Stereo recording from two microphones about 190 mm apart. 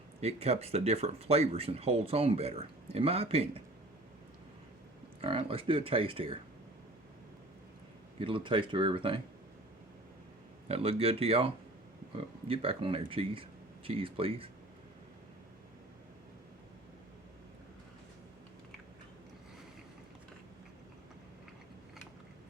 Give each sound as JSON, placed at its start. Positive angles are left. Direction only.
{"t": 0.2, "sound": "speech", "side_deg": -35}
{"t": 5.2, "sound": "speech", "side_deg": -30}
{"t": 8.2, "sound": "speech", "side_deg": -25}
{"t": 10.7, "sound": "speech", "side_deg": -30}